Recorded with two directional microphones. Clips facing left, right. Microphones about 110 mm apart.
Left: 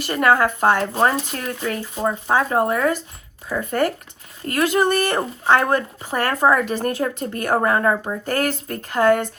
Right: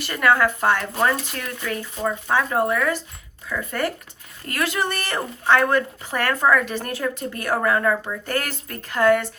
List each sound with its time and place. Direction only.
0.1 s speech: 40° left (ahead or behind)
0.8 s speech: 30° left (ahead or behind)